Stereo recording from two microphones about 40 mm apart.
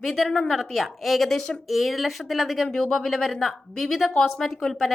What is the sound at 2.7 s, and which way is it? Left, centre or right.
A woman's voice, centre.